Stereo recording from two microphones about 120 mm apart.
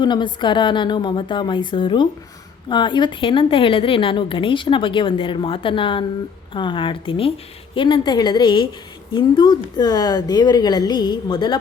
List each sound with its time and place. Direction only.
0.0 s a woman's voice: 40° left (ahead or behind)